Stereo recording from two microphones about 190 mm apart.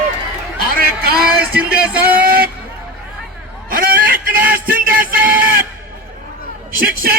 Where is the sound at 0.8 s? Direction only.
50° right (ahead or behind).